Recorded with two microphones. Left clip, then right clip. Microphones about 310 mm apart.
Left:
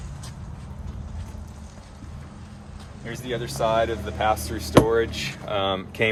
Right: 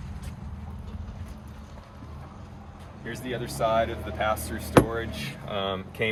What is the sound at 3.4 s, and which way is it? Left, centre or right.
Speech, centre.